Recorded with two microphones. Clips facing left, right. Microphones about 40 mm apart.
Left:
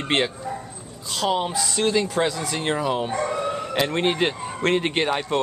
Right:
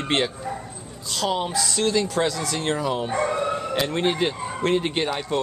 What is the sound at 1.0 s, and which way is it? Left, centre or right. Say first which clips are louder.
Speech: left 2 dB; left.